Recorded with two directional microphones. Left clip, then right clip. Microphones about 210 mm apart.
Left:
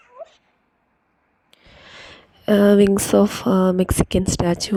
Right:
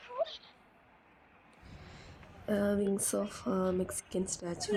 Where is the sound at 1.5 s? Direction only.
40° left (ahead or behind).